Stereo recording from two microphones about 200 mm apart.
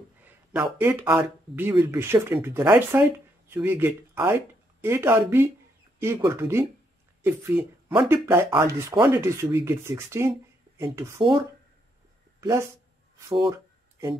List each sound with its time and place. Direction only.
0.2 s a sound: 5° right (ahead or behind)
1.5 s speech: 10° right (ahead or behind)
8.5 s speech: 25° right (ahead or behind)